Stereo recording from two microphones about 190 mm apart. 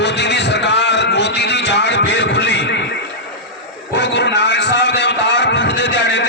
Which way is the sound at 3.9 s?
65° left (ahead or behind).